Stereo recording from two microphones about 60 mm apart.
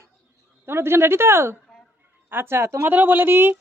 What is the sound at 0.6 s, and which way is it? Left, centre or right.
Speech, right.